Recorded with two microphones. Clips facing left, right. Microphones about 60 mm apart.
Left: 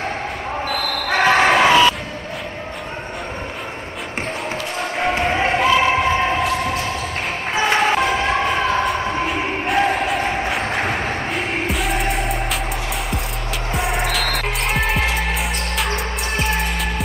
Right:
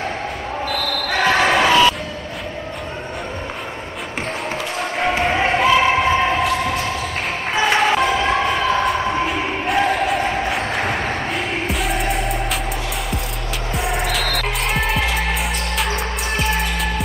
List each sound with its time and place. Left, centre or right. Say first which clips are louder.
1.0 s basketball bounce: left 2 dB; centre
4.9 s basketball bounce: right 1 dB; centre
7.5 s vehicle: right 1 dB; centre
8.3 s siren: right 1 dB; centre
8.7 s music: right 1 dB; centre
10.2 s a sound: even; centre
11.6 s music: even; centre
13.7 s music: even; centre